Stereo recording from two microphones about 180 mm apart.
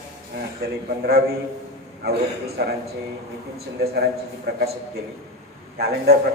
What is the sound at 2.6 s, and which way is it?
Speech, 65° right (ahead or behind).